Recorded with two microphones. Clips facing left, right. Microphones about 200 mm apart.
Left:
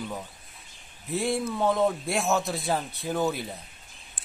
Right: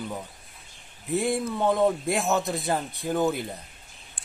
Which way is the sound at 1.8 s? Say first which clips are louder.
Right 2 dB; centre (ahead or behind).